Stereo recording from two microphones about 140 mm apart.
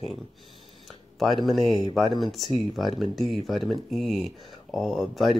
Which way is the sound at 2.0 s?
30° left (ahead or behind).